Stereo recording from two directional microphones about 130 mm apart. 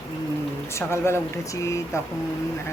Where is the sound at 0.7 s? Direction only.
20° left (ahead or behind).